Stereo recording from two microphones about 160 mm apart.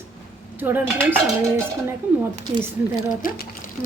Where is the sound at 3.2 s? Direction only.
60° left (ahead or behind).